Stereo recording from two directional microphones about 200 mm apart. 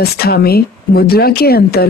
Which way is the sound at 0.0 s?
50° left (ahead or behind).